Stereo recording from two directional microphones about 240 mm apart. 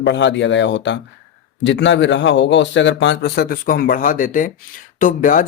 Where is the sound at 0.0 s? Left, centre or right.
Left.